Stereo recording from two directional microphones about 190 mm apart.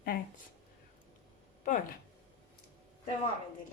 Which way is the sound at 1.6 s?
40° left (ahead or behind).